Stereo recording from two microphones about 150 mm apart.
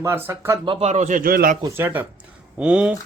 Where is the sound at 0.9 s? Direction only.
50° right (ahead or behind); by 1.5 s 80° right.